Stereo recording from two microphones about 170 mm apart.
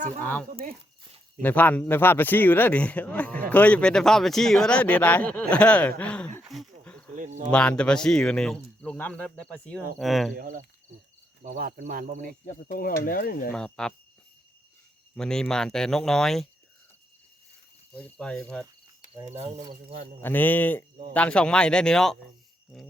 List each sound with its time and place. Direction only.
0.2 s speech: 10° left (ahead or behind)
6.4 s a sound: centre (ahead or behind)
7.2 s cricket: 45° right (ahead or behind)
7.5 s speech: 5° left (ahead or behind)
10.3 s speech: 55° right (ahead or behind)
12.5 s speech: 50° left (ahead or behind)
13.5 s speech: 5° left (ahead or behind)
15.1 s speech: 5° left (ahead or behind)
17.9 s speech: 5° left (ahead or behind)
19.3 s speech: 40° right (ahead or behind)
20.2 s speech: 10° left (ahead or behind)